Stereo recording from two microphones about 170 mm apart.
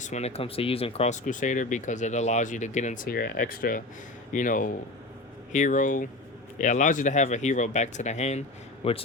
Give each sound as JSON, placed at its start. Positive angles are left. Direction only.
{"t": 0.0, "sound": "speech", "side_deg": 40}